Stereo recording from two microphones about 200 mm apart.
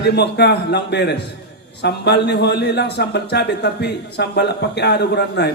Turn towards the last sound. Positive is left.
turn(degrees=55)  # may be behind; listen again after turning